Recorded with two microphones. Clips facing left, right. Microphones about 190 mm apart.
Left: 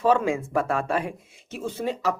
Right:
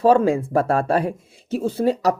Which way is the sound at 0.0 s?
35° right (ahead or behind).